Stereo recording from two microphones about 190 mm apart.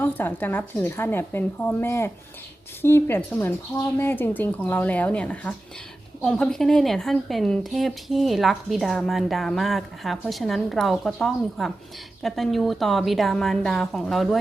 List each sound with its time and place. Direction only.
0.0 s speech: 10° left (ahead or behind)